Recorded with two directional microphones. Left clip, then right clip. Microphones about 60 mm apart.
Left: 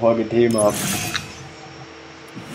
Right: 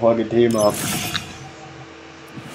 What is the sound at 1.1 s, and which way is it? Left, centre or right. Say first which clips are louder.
Music: even; centre.